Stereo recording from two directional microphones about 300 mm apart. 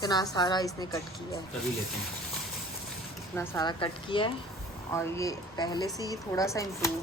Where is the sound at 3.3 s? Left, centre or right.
Centre.